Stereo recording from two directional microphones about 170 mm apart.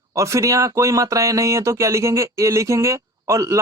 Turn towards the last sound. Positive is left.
turn(degrees=-20)  # may be behind; listen again after turning